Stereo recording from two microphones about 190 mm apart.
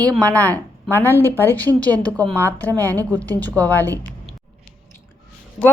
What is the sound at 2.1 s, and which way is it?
Speech, 20° right (ahead or behind).